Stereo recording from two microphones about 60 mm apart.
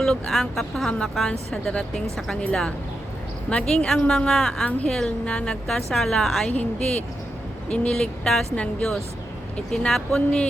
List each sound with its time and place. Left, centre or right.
0.0 s a woman's voice: centre